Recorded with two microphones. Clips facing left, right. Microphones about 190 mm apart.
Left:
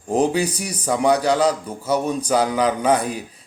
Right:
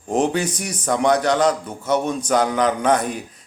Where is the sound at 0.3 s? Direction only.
35° left (ahead or behind).